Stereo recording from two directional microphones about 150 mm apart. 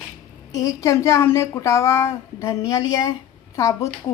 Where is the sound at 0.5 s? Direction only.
25° left (ahead or behind).